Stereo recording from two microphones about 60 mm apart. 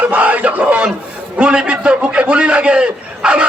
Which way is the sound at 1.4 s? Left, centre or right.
Centre.